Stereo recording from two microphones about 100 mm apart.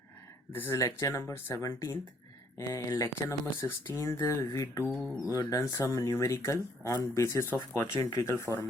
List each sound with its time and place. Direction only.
0.5 s speech: 20° left (ahead or behind)
0.8 s speech: 35° left (ahead or behind)